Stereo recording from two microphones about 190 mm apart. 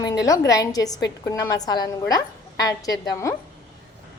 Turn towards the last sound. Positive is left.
turn(degrees=20)  # may be behind; listen again after turning